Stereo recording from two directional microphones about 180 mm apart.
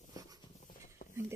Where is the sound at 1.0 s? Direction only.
50° left (ahead or behind).